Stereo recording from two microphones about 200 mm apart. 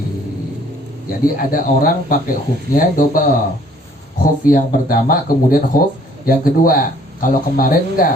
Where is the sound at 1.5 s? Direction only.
45° left (ahead or behind).